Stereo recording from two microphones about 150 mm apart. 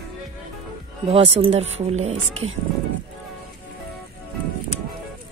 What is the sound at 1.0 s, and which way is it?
Speech, 40° right (ahead or behind).